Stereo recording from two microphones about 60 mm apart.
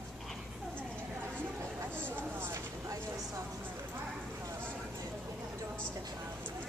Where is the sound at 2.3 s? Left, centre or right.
Right.